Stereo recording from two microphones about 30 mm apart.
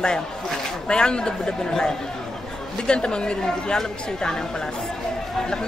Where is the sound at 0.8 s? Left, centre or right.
Left.